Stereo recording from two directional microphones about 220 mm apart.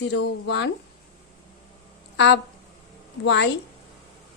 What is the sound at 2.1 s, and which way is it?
Speech, 55° left (ahead or behind).